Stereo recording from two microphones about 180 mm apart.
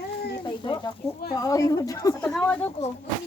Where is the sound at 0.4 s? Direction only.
25° left (ahead or behind).